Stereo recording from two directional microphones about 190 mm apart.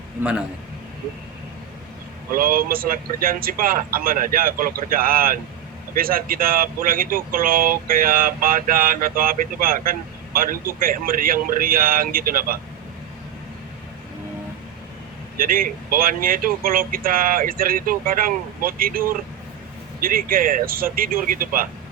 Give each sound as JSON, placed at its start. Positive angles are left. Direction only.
{"t": 0.2, "sound": "a man's voice", "side_deg": -5}
{"t": 2.3, "sound": "speech", "side_deg": -50}
{"t": 15.4, "sound": "speech", "side_deg": -50}